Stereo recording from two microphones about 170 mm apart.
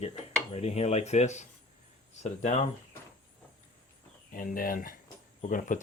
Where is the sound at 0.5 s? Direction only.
40° left (ahead or behind).